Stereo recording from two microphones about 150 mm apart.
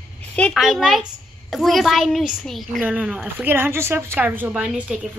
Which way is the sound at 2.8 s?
10° right (ahead or behind).